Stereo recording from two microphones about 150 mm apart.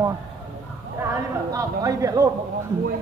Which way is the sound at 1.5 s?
20° right (ahead or behind).